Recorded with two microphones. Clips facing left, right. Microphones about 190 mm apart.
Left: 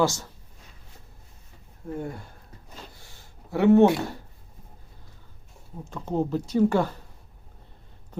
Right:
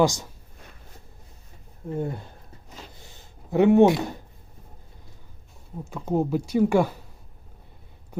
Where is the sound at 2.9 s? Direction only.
20° right (ahead or behind).